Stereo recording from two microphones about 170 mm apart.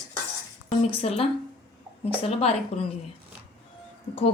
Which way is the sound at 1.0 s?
35° left (ahead or behind).